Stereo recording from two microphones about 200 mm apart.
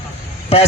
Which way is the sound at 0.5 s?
30° left (ahead or behind).